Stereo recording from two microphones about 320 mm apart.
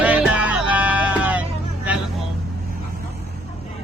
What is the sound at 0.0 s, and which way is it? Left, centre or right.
Music, centre.